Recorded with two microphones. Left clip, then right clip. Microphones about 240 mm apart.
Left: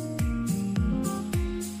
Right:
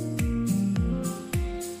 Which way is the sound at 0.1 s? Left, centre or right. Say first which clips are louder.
Right 2 dB; centre.